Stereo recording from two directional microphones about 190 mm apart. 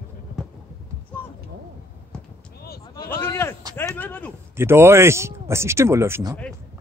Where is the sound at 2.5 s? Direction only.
55° left (ahead or behind).